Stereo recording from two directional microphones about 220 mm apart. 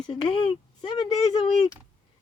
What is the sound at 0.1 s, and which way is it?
Speech, 25° left (ahead or behind).